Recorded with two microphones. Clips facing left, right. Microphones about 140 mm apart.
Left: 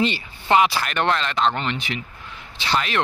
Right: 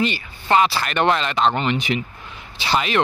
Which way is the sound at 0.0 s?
25° left (ahead or behind).